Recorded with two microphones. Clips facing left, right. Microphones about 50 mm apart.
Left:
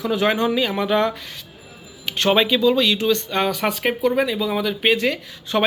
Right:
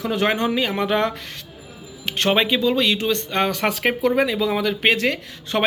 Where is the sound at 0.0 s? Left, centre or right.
Right.